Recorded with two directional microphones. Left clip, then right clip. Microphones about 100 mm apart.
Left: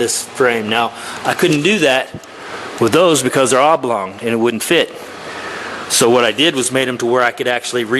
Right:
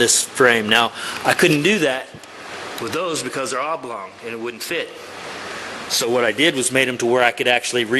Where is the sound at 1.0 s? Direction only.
Centre (ahead or behind).